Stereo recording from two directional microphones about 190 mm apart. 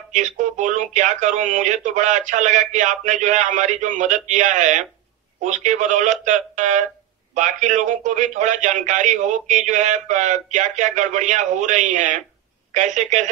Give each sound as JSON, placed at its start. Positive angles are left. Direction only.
{"t": 0.1, "sound": "a man's voice", "side_deg": -40}